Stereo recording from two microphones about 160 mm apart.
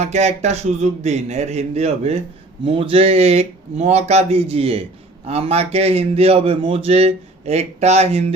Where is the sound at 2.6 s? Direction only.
35° right (ahead or behind).